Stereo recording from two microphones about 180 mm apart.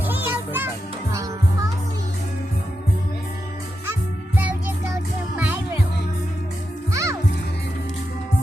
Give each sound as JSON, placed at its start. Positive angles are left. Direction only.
{"t": 0.0, "sound": "music", "side_deg": -10}
{"t": 5.4, "sound": "music", "side_deg": -10}
{"t": 6.9, "sound": "music", "side_deg": -20}